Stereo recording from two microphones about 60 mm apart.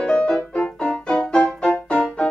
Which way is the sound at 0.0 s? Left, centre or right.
Centre.